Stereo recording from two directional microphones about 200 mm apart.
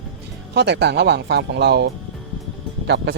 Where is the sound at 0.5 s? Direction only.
60° right (ahead or behind).